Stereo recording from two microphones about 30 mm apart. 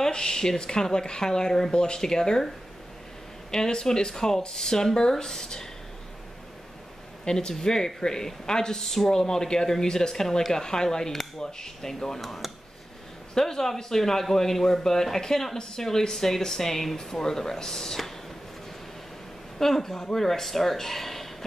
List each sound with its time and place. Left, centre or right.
0.1 s speech: left
3.5 s speech: left
4.1 s speech: centre
7.2 s speech: left
8.8 s speech: centre
12.2 s speech: centre
13.3 s speech: centre
19.6 s speech: centre